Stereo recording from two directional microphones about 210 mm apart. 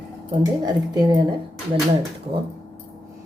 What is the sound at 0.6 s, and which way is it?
Speech, 20° right (ahead or behind).